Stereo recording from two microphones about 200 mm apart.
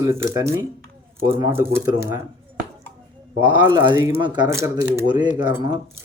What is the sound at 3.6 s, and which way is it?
Speech, 10° right (ahead or behind).